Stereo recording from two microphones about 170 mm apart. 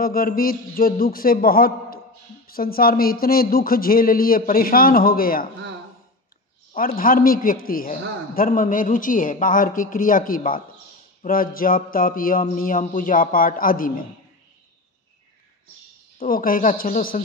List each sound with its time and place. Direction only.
0.0 s a man's voice: 60° left (ahead or behind)
6.7 s a man's voice: 55° left (ahead or behind)
16.2 s a man's voice: 55° left (ahead or behind)